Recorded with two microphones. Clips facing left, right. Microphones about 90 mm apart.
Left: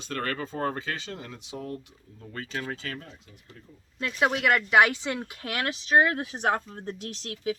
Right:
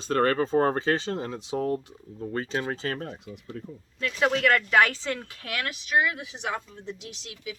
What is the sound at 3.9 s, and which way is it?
Speech, 20° left (ahead or behind).